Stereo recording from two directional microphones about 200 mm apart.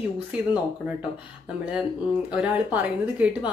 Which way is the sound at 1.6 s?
5° right (ahead or behind).